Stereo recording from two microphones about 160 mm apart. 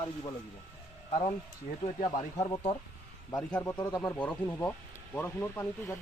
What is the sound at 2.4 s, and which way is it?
Speech, 25° left (ahead or behind).